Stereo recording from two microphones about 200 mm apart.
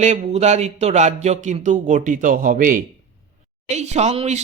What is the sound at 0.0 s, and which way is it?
Speech, 35° right (ahead or behind).